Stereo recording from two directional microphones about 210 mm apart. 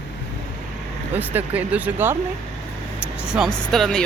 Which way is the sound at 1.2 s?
10° right (ahead or behind).